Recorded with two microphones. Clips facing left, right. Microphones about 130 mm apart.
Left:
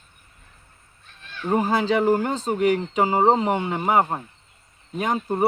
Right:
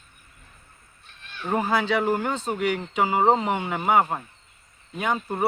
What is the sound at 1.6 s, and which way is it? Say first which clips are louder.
Speech: left 3 dB; 35° left (ahead or behind).